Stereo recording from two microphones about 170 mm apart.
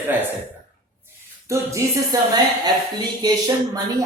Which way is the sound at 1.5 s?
15° right (ahead or behind).